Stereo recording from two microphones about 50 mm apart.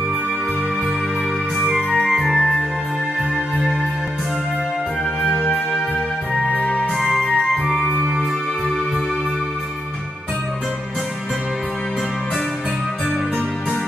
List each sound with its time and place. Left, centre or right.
1.6 s music: centre
5.2 s music: centre
6.5 s music: left
6.9 s music: centre